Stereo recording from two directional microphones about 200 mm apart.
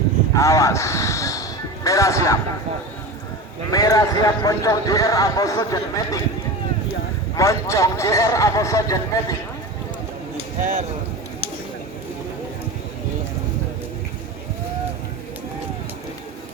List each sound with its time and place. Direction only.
0.3 s a sound: 15° left (ahead or behind)
3.7 s speech: 20° left (ahead or behind)
7.3 s speech: 15° left (ahead or behind)